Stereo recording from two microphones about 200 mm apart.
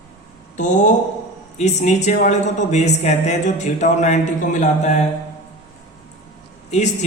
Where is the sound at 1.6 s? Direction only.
35° left (ahead or behind).